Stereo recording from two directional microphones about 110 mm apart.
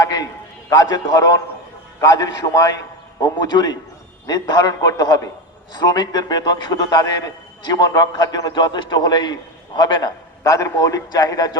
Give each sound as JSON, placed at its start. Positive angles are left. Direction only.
{"t": 0.0, "sound": "a man's voice", "side_deg": 35}